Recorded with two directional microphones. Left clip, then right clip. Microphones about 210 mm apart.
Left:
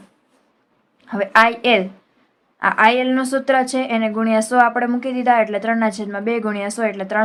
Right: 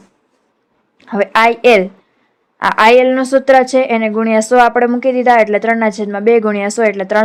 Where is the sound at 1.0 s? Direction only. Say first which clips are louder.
Right 3 dB; 35° right (ahead or behind).